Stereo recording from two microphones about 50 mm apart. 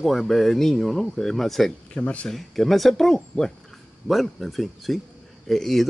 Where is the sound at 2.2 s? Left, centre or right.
Centre.